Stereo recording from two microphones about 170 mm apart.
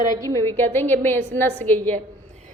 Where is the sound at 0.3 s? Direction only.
15° left (ahead or behind).